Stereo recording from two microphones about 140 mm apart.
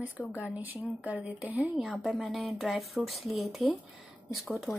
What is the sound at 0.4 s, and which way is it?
A woman's voice, 10° right (ahead or behind).